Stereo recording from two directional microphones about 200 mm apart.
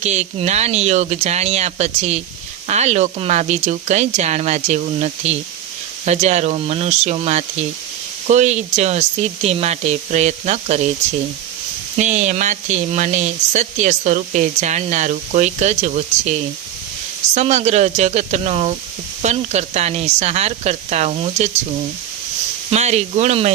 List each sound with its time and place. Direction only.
0.0 s speech: 35° right (ahead or behind)
11.9 s speech: 35° right (ahead or behind)
22.7 s speech: 35° right (ahead or behind)